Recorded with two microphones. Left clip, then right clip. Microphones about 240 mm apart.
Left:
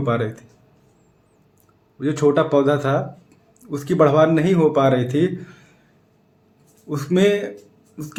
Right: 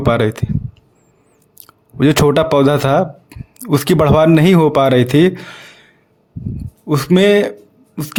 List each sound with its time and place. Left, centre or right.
0.0 s speech: right
2.0 s speech: right
6.8 s speech: right